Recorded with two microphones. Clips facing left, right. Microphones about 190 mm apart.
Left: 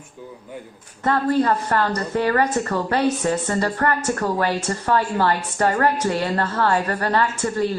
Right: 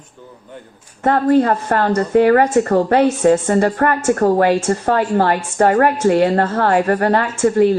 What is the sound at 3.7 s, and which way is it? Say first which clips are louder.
Speech: right 6 dB; 45° right (ahead or behind).